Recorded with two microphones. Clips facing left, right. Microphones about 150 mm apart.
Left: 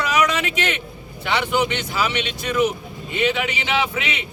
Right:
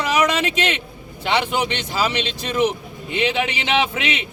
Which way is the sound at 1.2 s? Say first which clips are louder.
Even; 25° right (ahead or behind).